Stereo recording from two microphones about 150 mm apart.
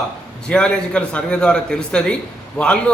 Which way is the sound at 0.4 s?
5° left (ahead or behind).